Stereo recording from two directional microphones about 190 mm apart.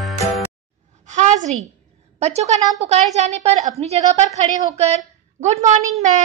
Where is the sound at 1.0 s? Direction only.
40° right (ahead or behind).